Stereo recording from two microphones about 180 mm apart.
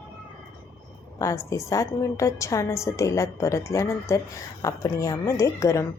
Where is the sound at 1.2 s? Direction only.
15° left (ahead or behind).